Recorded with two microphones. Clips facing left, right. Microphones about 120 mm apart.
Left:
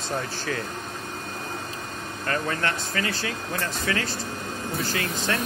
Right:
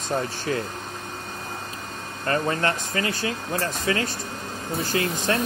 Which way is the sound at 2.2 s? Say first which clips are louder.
Right 4 dB; 30° right (ahead or behind).